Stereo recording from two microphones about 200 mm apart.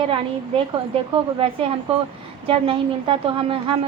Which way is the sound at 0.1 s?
25° right (ahead or behind).